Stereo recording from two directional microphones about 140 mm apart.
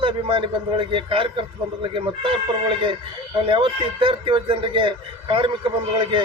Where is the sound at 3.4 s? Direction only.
35° right (ahead or behind).